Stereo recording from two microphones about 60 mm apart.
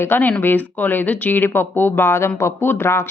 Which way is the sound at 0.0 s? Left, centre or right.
Left.